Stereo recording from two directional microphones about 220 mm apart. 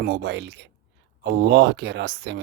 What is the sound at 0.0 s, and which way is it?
Speech, 50° right (ahead or behind).